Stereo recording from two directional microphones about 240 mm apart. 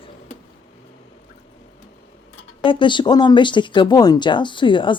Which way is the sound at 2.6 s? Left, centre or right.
Left.